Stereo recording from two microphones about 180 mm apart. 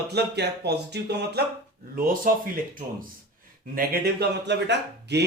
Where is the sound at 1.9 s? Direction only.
50° right (ahead or behind).